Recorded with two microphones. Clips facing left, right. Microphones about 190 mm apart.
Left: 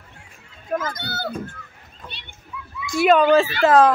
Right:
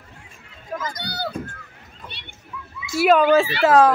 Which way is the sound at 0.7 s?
50° left (ahead or behind).